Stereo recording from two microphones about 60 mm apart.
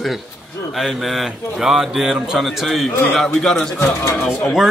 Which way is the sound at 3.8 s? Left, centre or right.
Left.